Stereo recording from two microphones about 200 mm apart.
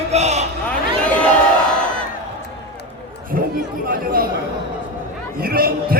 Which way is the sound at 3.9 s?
45° right (ahead or behind).